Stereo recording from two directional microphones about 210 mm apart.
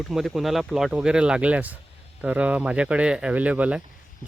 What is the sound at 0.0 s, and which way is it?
Speech, centre (ahead or behind).